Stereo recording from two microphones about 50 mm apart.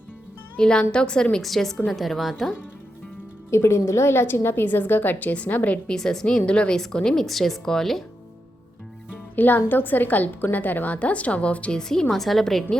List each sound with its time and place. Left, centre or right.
0.5 s a woman's voice: centre
1.4 s a woman's voice: centre
3.5 s a woman's voice: left
5.3 s a woman's voice: left
5.9 s a woman's voice: centre
7.3 s a woman's voice: centre
9.3 s a woman's voice: left
11.8 s a woman's voice: centre